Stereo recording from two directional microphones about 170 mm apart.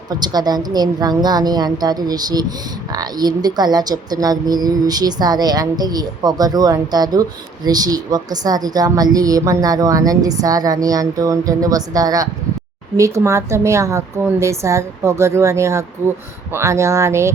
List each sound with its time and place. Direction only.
0.1 s a woman's voice: 25° right (ahead or behind)